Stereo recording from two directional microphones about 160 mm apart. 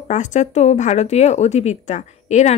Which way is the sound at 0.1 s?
50° left (ahead or behind).